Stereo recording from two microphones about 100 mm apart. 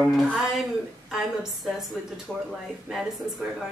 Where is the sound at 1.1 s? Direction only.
5° right (ahead or behind).